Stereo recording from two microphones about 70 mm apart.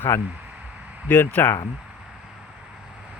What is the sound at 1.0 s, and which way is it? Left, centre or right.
Speech, left.